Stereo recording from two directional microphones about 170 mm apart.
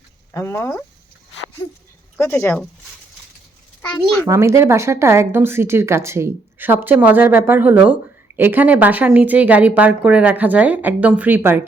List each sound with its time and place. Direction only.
0.3 s speech: 15° left (ahead or behind)
2.1 s speech: 15° left (ahead or behind)
3.8 s a sound: 5° left (ahead or behind)
4.3 s speech: 15° right (ahead or behind)